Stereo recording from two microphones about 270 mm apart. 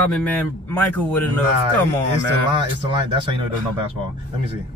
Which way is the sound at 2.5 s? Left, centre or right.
Centre.